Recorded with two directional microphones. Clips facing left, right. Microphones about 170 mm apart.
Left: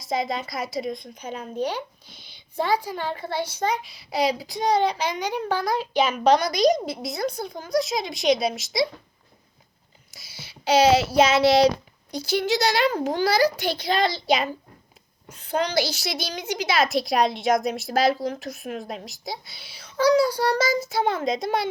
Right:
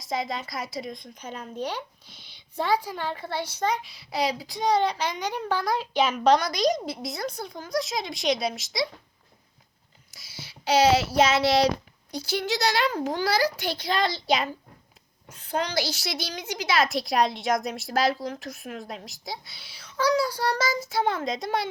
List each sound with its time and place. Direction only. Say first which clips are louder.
0.1 s a woman's voice: left 4 dB; 20° left (ahead or behind); by 3.7 s centre (ahead or behind)
3.8 s a woman's voice: left 4 dB; 15° left (ahead or behind)
10.3 s a woman's voice: left 3 dB; 15° left (ahead or behind)
16.0 s a woman's voice: left 3 dB; 15° left (ahead or behind)
20.1 s a woman's voice: left 5 dB; 15° left (ahead or behind)